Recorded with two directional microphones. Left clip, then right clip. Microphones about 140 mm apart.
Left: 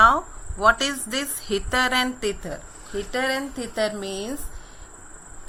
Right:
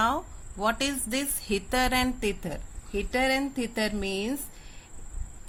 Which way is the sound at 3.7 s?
60° right (ahead or behind).